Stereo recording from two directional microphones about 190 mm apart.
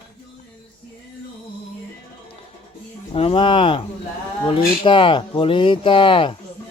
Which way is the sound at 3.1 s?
30° left (ahead or behind).